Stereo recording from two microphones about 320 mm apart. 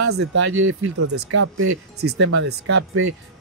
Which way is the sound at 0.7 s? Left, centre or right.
Right.